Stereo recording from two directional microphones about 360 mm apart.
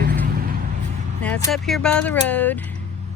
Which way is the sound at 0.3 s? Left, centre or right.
Right.